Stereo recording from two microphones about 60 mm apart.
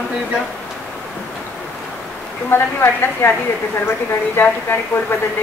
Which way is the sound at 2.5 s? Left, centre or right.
Left.